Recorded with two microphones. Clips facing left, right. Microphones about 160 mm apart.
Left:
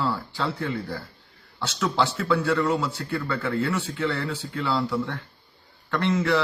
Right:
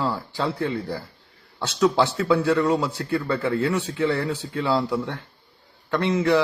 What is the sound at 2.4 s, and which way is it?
A man's voice, 15° right (ahead or behind).